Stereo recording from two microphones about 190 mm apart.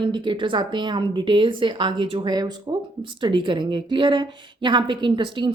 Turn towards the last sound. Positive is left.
turn(degrees=-25)  # may be behind; listen again after turning